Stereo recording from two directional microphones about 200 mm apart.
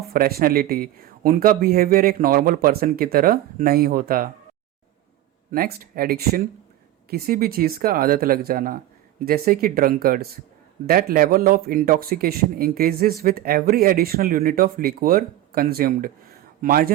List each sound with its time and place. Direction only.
0.1 s speech: 50° right (ahead or behind)
5.5 s speech: 45° right (ahead or behind)